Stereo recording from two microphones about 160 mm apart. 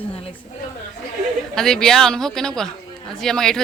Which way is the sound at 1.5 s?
5° left (ahead or behind).